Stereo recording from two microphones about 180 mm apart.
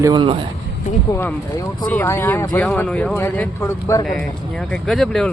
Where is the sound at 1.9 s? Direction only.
15° left (ahead or behind).